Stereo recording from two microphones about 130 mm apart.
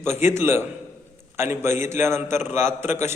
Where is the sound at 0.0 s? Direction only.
20° right (ahead or behind).